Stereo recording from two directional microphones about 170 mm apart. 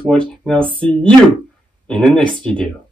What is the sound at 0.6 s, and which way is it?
Speech, 30° right (ahead or behind).